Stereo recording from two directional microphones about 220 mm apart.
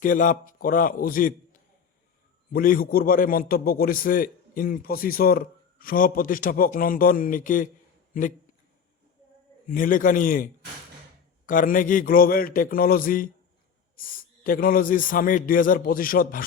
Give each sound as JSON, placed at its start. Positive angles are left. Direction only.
{"t": 0.0, "sound": "a man's voice", "side_deg": 35}
{"t": 2.5, "sound": "a man's voice", "side_deg": 40}
{"t": 9.6, "sound": "a man's voice", "side_deg": 40}